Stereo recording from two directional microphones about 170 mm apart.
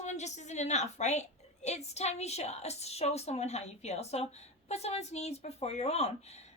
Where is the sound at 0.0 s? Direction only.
40° left (ahead or behind).